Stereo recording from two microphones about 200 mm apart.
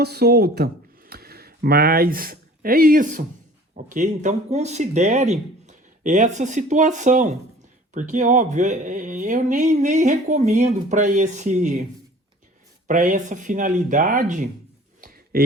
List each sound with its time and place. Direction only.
0.0 s speech: 55° right (ahead or behind); by 11.8 s 35° right (ahead or behind)
12.9 s speech: 40° right (ahead or behind)
15.0 s a sound: 50° right (ahead or behind)